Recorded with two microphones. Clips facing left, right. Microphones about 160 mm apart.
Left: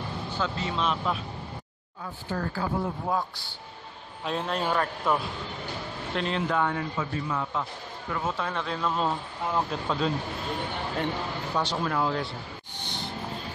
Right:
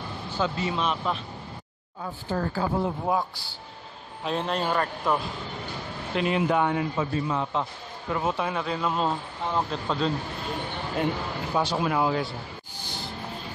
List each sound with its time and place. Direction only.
0.4 s a man's voice: 10° right (ahead or behind)
2.3 s speech: 25° right (ahead or behind)
3.1 s a man's voice: 10° right (ahead or behind)
6.1 s a man's voice: 10° right (ahead or behind)
11.5 s a man's voice: 10° right (ahead or behind)
12.7 s a sound: 5° right (ahead or behind)